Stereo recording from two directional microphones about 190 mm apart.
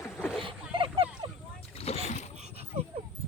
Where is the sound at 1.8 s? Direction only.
30° left (ahead or behind).